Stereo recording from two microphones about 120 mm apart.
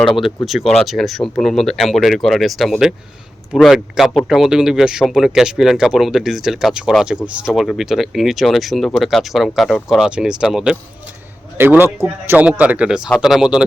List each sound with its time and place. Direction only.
0.4 s speech: centre (ahead or behind)
11.5 s speech: 15° right (ahead or behind)